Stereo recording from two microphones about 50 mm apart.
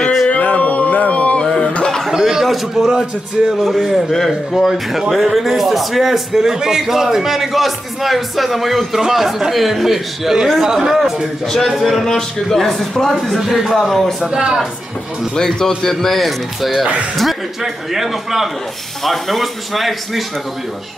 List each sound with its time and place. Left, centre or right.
0.0 s a sound: centre
0.3 s a sound: left
1.4 s cough: centre
2.0 s speech: centre
11.4 s speech: centre
13.7 s speech: centre
14.3 s speech: centre
15.3 s speech: centre